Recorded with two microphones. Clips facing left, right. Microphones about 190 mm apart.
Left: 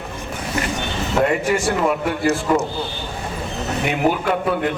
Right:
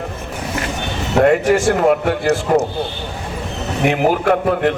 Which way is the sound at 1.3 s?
75° right (ahead or behind).